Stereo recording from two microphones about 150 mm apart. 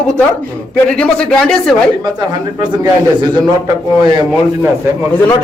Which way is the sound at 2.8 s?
25° right (ahead or behind).